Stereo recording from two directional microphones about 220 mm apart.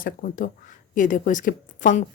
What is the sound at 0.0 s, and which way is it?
A woman's voice, 40° left (ahead or behind).